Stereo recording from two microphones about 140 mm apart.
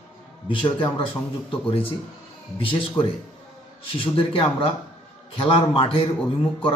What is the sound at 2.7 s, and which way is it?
Speech, 40° left (ahead or behind).